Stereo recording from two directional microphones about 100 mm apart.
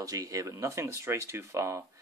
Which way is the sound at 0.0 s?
35° right (ahead or behind).